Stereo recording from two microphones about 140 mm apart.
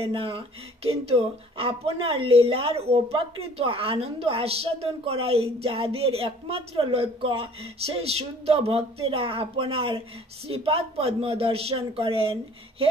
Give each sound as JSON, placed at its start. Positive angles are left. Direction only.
{"t": 0.0, "sound": "speech", "side_deg": -40}